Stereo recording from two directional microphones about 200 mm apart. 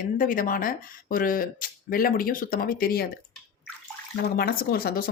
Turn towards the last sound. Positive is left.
turn(degrees=50)  # may be behind; listen again after turning